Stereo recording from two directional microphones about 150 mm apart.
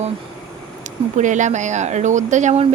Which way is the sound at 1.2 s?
55° right (ahead or behind).